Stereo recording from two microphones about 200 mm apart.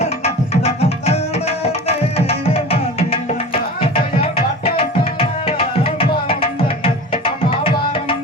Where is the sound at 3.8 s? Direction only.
30° left (ahead or behind).